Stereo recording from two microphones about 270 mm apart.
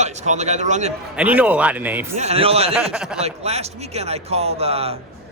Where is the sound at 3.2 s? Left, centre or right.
Right.